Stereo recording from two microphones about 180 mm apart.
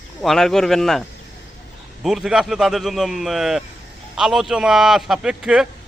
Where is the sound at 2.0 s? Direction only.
5° right (ahead or behind).